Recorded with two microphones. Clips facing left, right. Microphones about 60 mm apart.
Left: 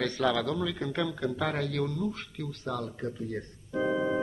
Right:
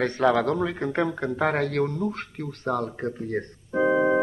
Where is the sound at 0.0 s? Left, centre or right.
Right.